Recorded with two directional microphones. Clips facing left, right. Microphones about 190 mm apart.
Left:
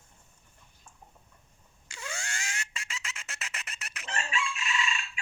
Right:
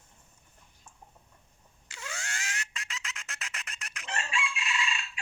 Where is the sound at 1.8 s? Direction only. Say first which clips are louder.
Left 1 dB; 5° right (ahead or behind).